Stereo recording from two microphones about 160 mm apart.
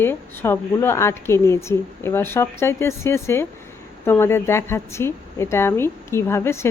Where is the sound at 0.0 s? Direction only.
15° left (ahead or behind).